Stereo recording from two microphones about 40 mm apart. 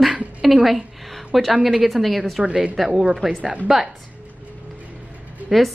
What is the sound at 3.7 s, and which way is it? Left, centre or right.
Speech, centre.